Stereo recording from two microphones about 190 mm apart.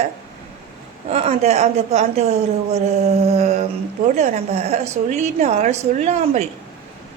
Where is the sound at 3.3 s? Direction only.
35° right (ahead or behind).